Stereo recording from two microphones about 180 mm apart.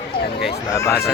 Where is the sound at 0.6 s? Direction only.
20° left (ahead or behind).